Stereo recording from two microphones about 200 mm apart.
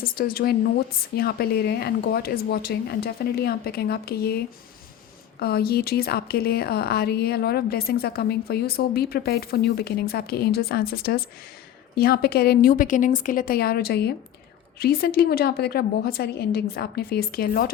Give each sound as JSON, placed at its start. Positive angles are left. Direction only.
{"t": 0.0, "sound": "speech", "side_deg": 45}